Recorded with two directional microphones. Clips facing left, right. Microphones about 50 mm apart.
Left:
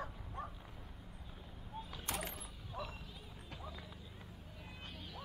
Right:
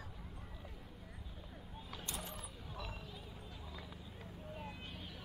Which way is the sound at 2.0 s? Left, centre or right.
Left.